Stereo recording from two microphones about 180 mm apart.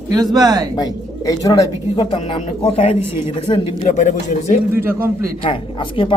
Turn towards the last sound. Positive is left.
turn(degrees=30)  # may be behind; listen again after turning